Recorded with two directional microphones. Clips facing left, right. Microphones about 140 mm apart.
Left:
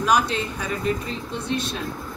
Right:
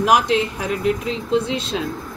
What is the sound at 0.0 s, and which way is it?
A woman's voice, 85° right.